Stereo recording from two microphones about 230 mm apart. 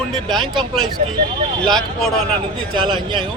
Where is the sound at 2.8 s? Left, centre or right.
Centre.